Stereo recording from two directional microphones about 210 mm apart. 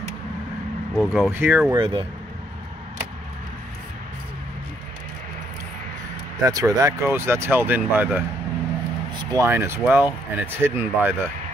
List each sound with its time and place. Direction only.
0.9 s speech: centre (ahead or behind)
1.8 s speech: 25° right (ahead or behind)
6.4 s speech: 15° right (ahead or behind)
9.2 s speech: 15° right (ahead or behind)